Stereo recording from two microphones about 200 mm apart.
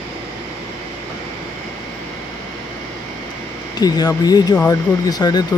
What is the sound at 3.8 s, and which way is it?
Speech, 20° left (ahead or behind).